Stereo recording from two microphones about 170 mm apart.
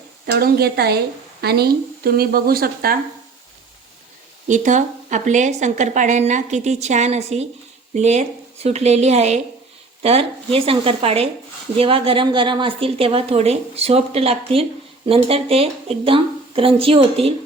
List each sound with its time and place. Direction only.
0.3 s speech: 65° right (ahead or behind)
4.4 s a woman's voice: 45° right (ahead or behind)